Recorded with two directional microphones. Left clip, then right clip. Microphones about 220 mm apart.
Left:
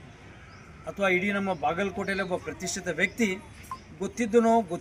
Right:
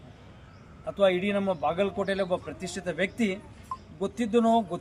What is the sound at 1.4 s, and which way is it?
Speech, 5° left (ahead or behind).